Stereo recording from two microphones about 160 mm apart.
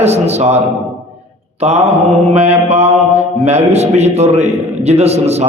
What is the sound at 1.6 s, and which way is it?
A man's voice, 40° right (ahead or behind).